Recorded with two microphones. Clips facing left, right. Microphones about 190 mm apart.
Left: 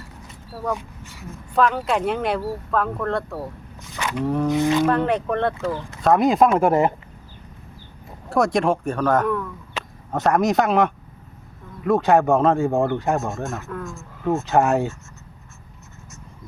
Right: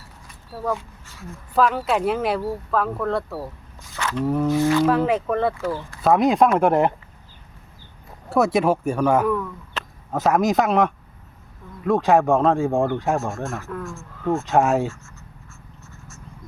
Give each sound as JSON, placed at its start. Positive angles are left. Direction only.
{"t": 0.7, "sound": "speech", "side_deg": 15}
{"t": 1.5, "sound": "speech", "side_deg": -5}
{"t": 3.9, "sound": "speech", "side_deg": 15}
{"t": 4.9, "sound": "speech", "side_deg": -5}
{"t": 8.3, "sound": "speech", "side_deg": -5}